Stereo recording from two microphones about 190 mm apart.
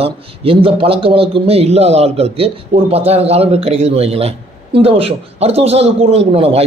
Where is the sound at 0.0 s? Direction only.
30° right (ahead or behind).